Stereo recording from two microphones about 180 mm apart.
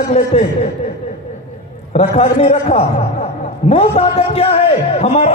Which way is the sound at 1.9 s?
35° left (ahead or behind).